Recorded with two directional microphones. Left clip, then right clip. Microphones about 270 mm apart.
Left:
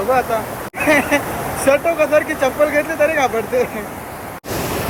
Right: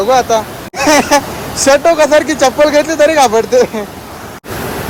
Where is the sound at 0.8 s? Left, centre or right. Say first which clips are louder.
Right 6 dB; centre.